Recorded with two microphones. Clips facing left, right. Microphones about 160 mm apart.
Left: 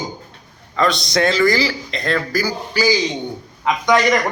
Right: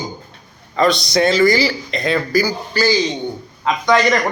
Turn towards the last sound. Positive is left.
turn(degrees=15)  # may be behind; listen again after turning